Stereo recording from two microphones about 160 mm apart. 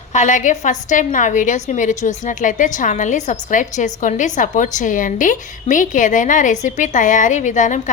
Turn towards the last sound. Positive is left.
turn(degrees=50)  # may be behind; listen again after turning